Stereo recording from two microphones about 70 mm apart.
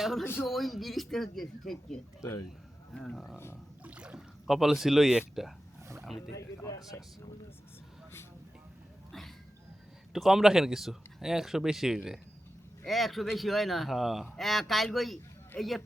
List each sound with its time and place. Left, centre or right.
0.0 s a man's voice: centre
3.3 s speech: left
3.8 s a sound: centre
4.4 s speech: centre
6.7 s speech: left
10.1 s speech: centre